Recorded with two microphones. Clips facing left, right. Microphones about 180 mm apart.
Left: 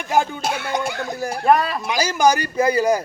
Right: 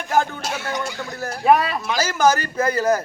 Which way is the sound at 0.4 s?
60° left (ahead or behind).